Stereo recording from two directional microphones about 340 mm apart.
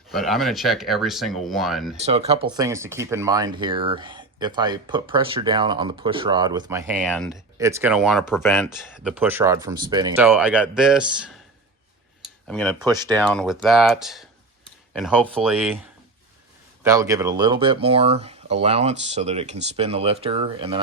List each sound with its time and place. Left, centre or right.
0.1 s speech: centre
2.0 s speech: centre
12.5 s speech: centre
12.8 s speech: centre
13.2 s speech: centre
16.8 s speech: centre